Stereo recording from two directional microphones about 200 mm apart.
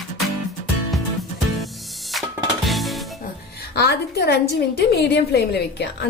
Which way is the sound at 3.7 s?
55° left (ahead or behind).